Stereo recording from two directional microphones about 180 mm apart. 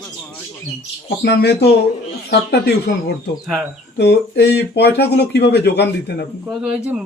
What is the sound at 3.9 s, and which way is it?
Speech, 70° left (ahead or behind).